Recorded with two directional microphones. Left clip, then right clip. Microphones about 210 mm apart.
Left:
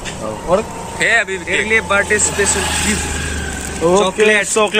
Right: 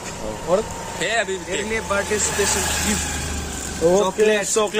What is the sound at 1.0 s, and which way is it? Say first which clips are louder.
Speech: left 8 dB; 15° right (ahead or behind).